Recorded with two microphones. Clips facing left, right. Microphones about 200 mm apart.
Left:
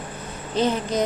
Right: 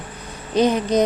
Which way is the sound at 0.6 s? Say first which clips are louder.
Right 5 dB; 15° right (ahead or behind).